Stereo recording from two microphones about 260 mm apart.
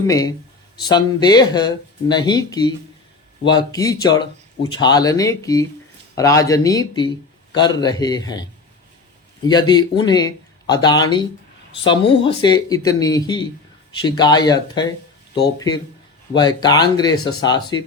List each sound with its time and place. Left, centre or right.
0.1 s speech: centre
16.3 s speech: centre